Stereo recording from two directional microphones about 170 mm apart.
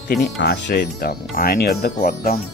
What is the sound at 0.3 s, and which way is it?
Speech, 80° left.